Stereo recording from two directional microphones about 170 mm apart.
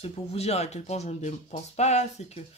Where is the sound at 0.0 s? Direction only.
35° left (ahead or behind).